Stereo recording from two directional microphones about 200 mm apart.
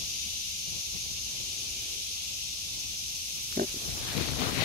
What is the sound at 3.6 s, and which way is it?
Pig, 45° right (ahead or behind).